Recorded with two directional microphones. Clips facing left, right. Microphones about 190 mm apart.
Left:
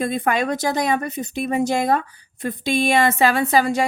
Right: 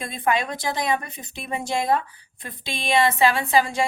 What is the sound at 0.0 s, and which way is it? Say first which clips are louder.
A woman's voice: left 4 dB; 45° left (ahead or behind).